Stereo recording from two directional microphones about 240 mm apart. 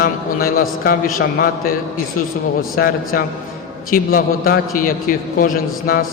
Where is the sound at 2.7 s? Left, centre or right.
Left.